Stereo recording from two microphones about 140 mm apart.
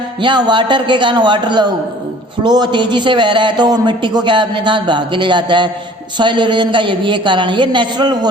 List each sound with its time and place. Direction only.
0.2 s speech: 30° right (ahead or behind)